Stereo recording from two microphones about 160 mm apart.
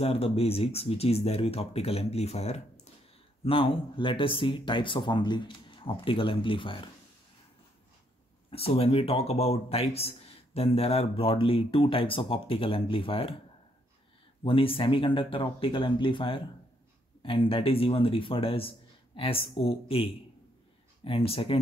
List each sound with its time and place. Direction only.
0.0 s speech: 40° left (ahead or behind)
8.5 s speech: 35° left (ahead or behind)
14.4 s speech: 35° left (ahead or behind)